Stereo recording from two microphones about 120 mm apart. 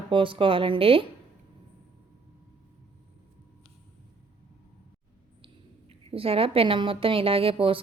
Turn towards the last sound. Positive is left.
turn(degrees=-50)  # may be behind; listen again after turning